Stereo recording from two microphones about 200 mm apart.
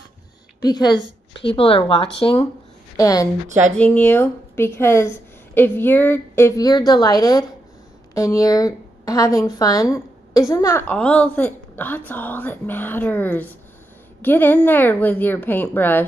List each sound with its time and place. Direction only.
0.6 s a woman's voice: 20° left (ahead or behind)
3.4 s speech: 35° right (ahead or behind)
3.7 s a woman's voice: 5° left (ahead or behind)